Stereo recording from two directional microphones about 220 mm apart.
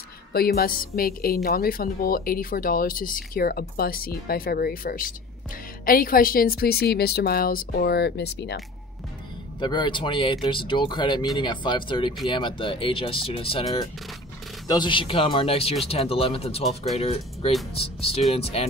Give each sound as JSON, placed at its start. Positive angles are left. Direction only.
{"t": 0.6, "sound": "speech", "side_deg": 40}
{"t": 9.6, "sound": "speech", "side_deg": 20}